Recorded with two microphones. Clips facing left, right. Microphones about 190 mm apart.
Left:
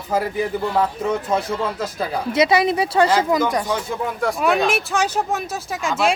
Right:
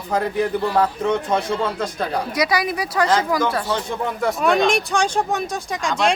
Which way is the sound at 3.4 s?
15° left (ahead or behind).